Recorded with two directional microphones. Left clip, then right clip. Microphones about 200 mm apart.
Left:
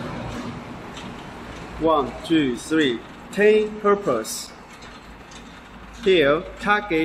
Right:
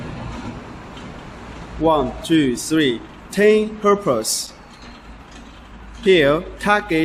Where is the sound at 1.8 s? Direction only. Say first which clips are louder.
Right 3 dB; 55° right (ahead or behind).